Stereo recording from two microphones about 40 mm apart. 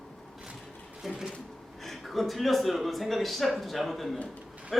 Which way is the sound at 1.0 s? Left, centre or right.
Centre.